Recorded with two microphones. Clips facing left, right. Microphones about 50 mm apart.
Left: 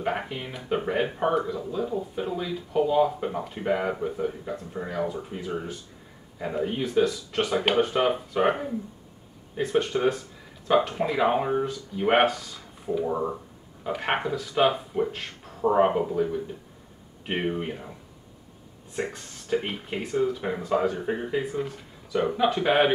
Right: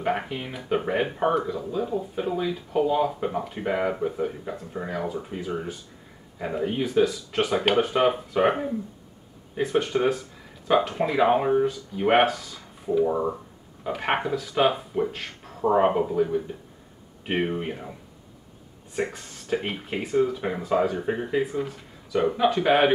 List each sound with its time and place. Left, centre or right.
0.0 s speech: centre
18.9 s speech: centre